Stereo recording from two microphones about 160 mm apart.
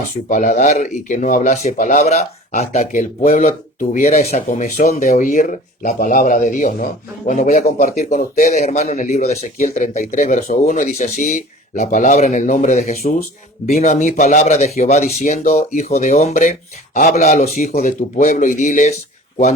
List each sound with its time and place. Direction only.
0.3 s speech: 50° left (ahead or behind)